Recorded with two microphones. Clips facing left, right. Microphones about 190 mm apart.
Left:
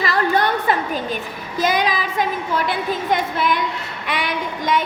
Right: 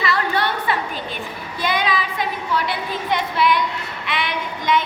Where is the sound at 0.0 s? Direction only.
45° left (ahead or behind).